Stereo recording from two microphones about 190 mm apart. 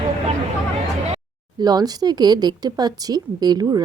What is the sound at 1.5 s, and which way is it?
Speech, 20° right (ahead or behind).